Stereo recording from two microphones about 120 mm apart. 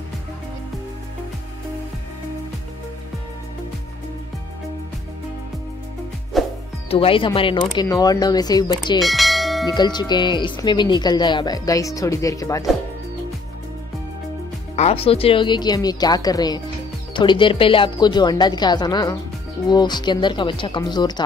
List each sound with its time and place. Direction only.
6.3 s music: centre (ahead or behind)
6.9 s speech: 50° left (ahead or behind)
7.8 s speech: 30° left (ahead or behind)
9.0 s bell: centre (ahead or behind)
9.8 s speech: 35° left (ahead or behind)
14.8 s speech: 60° left (ahead or behind); by 21.2 s 35° left (ahead or behind)